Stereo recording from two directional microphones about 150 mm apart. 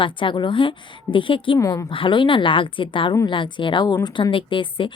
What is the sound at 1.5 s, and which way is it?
Speech, 20° left (ahead or behind).